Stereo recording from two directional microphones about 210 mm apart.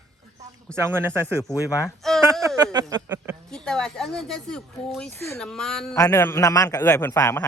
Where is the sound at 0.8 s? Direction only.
10° right (ahead or behind).